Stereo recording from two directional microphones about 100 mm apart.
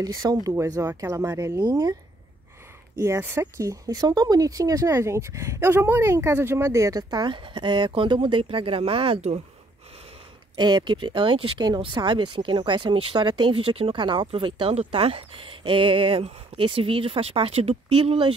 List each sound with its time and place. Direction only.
0.0 s speech: 40° right (ahead or behind)
3.2 s speech: 25° right (ahead or behind); by 9.4 s 80° right
10.5 s speech: 45° right (ahead or behind); by 13.9 s 70° right (ahead or behind)
13.9 s speech: 50° right (ahead or behind); by 18.3 s 70° right (ahead or behind)